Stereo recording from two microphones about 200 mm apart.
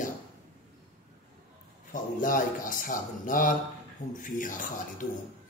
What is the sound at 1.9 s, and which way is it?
Speech, 40° left (ahead or behind).